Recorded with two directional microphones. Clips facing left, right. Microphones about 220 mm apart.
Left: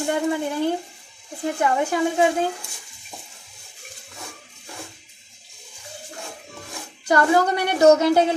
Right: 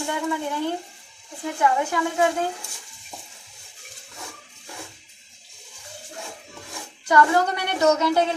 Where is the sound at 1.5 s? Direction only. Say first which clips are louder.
Left 1 dB; 40° left (ahead or behind).